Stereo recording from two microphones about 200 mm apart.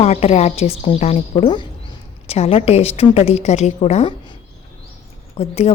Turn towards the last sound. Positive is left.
turn(degrees=30)  # may be behind; listen again after turning